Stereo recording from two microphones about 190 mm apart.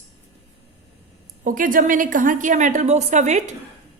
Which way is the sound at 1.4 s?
45° right (ahead or behind).